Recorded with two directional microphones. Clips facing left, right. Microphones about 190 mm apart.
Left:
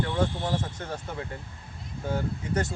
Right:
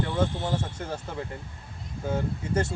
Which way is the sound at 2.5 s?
25° right (ahead or behind).